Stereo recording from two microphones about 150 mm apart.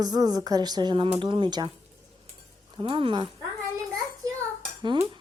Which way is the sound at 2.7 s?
35° right (ahead or behind).